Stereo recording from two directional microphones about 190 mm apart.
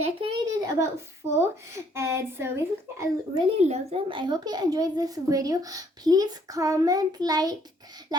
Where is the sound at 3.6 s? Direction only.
35° right (ahead or behind).